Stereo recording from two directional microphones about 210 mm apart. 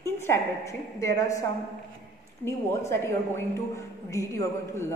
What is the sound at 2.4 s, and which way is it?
Speech, 10° left (ahead or behind).